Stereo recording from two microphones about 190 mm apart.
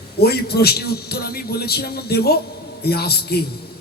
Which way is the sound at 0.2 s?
55° left (ahead or behind).